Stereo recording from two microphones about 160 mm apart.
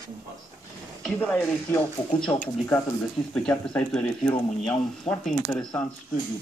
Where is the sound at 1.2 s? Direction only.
10° left (ahead or behind).